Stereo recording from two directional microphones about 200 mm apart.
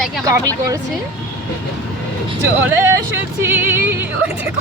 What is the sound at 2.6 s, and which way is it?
Speech, 10° right (ahead or behind).